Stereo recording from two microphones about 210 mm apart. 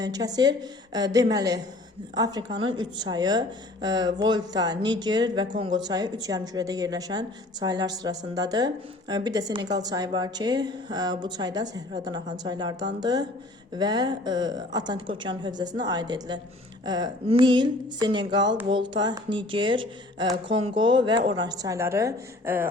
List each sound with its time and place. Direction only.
0.0 s a woman's voice: 20° right (ahead or behind)